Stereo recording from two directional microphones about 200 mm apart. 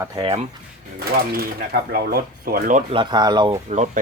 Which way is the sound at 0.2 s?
30° right (ahead or behind).